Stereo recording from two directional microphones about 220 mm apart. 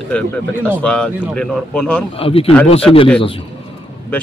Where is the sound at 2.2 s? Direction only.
25° left (ahead or behind).